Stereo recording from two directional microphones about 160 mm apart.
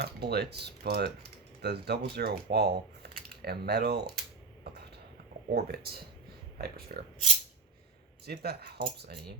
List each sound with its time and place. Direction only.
0.0 s speech: 90° right
4.7 s a sound: 90° right
5.5 s speech: 80° right
8.3 s speech: 80° right